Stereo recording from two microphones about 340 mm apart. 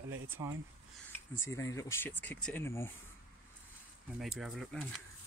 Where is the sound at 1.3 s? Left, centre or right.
Centre.